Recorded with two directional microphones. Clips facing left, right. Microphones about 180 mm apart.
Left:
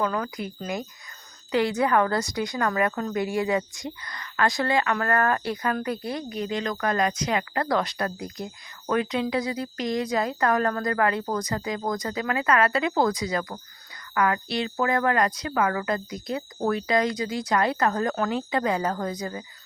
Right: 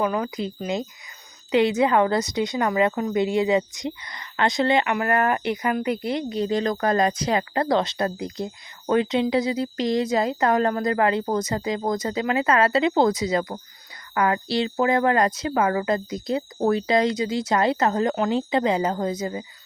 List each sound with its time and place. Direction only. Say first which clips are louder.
0.0 s a woman's voice: right 3 dB; 20° right (ahead or behind)